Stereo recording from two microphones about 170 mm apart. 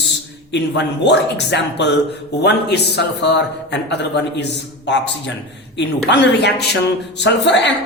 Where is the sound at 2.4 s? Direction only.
80° left.